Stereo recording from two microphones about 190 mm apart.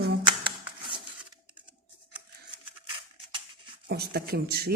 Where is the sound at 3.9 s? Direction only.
55° right (ahead or behind).